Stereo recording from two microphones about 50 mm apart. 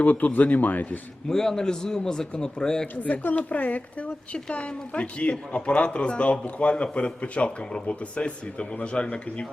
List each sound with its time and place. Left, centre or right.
0.0 s speech: left
1.3 s a man's voice: centre
2.8 s speech: left